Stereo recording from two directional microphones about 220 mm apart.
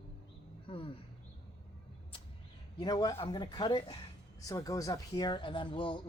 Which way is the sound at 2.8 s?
15° left (ahead or behind).